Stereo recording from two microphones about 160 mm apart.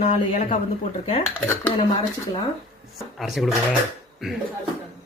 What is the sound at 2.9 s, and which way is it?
Speech, centre (ahead or behind).